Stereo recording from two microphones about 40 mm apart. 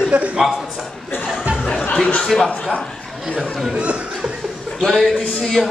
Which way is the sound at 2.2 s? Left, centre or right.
Centre.